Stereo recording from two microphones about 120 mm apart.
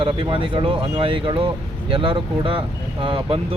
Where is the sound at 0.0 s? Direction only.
45° right (ahead or behind).